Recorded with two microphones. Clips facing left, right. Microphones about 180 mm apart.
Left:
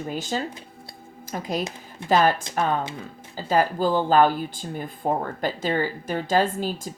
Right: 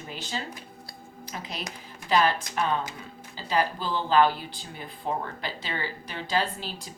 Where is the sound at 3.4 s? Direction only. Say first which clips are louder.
Left 6 dB; 45° left (ahead or behind).